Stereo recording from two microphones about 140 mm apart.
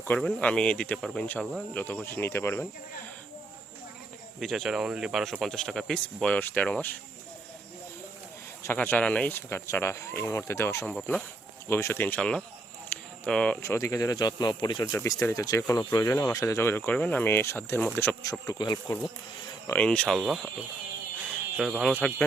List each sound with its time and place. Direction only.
0.1 s speech: 5° left (ahead or behind)
4.4 s speech: centre (ahead or behind)
8.6 s speech: 15° left (ahead or behind)
12.9 s a sound: 5° left (ahead or behind)
13.6 s speech: 20° left (ahead or behind)
18.2 s speech: 25° left (ahead or behind)
19.7 s speech: 10° left (ahead or behind)
21.2 s a sound: 5° right (ahead or behind)